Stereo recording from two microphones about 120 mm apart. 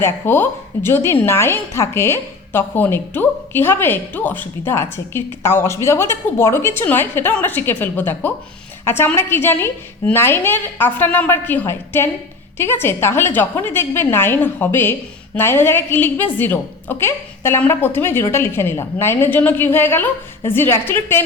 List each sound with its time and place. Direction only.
0.0 s a woman's voice: 20° left (ahead or behind)